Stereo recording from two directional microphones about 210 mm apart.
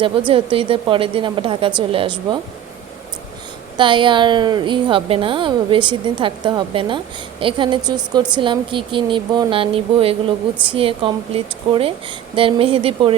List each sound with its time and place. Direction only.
0.3 s a woman's voice: 25° right (ahead or behind)
3.8 s a woman's voice: 25° right (ahead or behind)